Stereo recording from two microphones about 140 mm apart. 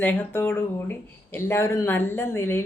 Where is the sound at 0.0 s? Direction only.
15° left (ahead or behind).